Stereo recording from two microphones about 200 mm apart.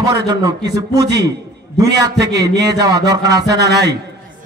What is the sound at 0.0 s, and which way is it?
A man's voice, 15° right (ahead or behind).